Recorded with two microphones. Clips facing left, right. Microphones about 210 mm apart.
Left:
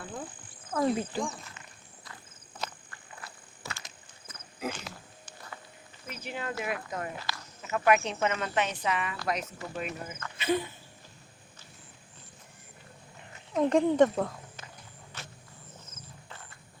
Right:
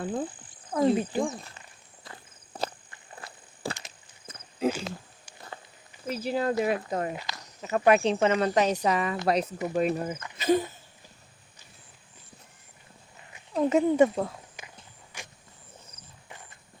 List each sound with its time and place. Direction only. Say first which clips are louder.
0.0 s wild animals: right 9 dB; 30° right (ahead or behind)
0.7 s speech: right 4 dB; 20° right (ahead or behind)
1.2 s speech: right 5 dB; 35° right (ahead or behind)
2.0 s walk: right 5 dB; 35° right (ahead or behind)
3.8 s a sound: right 1 dB; 25° right (ahead or behind)
6.1 s speech: right 10 dB; 35° right (ahead or behind)
13.6 s speech: right 1 dB; 5° right (ahead or behind)
15.1 s a sound: right 1 dB; 15° right (ahead or behind)